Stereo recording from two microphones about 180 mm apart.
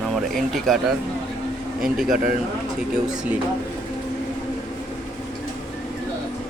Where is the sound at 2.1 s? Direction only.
45° right (ahead or behind).